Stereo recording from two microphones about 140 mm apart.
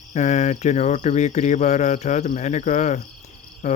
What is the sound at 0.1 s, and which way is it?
Speech, 55° left (ahead or behind).